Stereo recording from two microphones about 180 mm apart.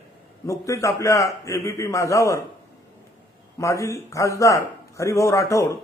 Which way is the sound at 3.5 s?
15° left (ahead or behind).